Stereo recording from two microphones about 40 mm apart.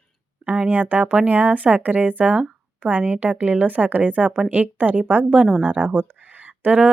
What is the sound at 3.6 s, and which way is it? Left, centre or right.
A woman's voice, right.